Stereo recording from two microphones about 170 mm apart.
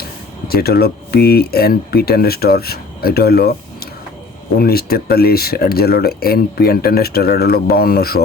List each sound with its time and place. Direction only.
0.4 s speech: 65° left (ahead or behind)
4.5 s speech: 65° left (ahead or behind)